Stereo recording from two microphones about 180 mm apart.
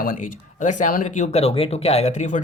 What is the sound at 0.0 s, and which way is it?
Speech, 50° left (ahead or behind).